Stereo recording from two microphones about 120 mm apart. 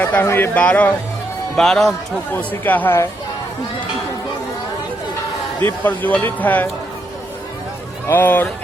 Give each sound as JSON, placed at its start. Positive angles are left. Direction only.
{"t": 0.0, "sound": "a man's voice", "side_deg": 15}
{"t": 5.6, "sound": "speech", "side_deg": 15}
{"t": 8.0, "sound": "speech", "side_deg": 15}